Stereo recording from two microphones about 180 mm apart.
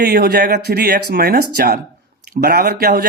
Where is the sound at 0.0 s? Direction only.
65° right (ahead or behind).